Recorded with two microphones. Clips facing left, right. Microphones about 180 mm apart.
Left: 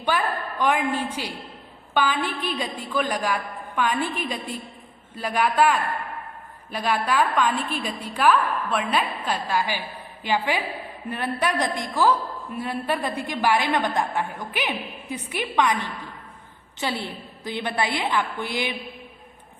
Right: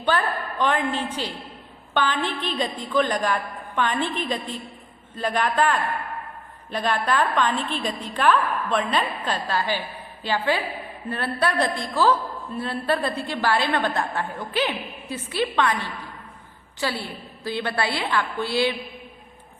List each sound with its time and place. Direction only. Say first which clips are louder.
0.1 s a woman's voice: right 1 dB; 10° left (ahead or behind)